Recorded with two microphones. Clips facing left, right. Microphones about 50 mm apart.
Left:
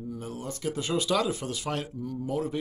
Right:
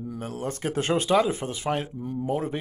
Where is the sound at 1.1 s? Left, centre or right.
Right.